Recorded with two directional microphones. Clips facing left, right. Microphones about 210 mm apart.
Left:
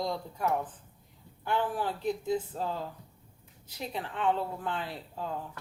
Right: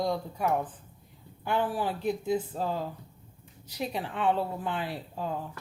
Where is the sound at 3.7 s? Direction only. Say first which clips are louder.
Right 3 dB; 15° right (ahead or behind).